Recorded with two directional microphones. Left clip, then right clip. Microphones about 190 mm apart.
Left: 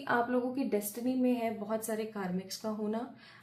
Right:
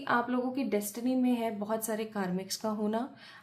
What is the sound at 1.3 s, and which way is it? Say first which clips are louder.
A woman's voice: right 1 dB; 35° right (ahead or behind).